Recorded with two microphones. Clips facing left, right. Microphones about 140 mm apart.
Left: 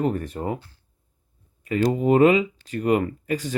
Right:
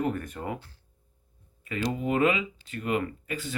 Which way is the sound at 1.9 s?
35° left (ahead or behind).